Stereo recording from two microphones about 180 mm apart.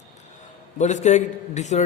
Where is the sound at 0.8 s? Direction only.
40° left (ahead or behind).